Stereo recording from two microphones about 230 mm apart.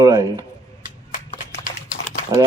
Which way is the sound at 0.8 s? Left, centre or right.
Left.